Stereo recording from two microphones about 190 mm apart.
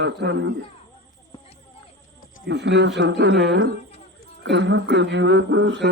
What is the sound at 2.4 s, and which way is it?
Speech, 65° right (ahead or behind).